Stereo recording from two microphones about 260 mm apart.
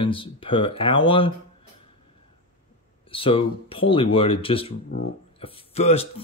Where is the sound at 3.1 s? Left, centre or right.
Left.